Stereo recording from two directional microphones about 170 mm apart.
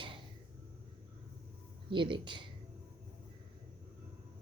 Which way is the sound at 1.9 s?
30° right (ahead or behind).